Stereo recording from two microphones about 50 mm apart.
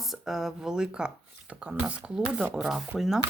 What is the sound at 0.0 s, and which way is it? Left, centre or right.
Speech, centre.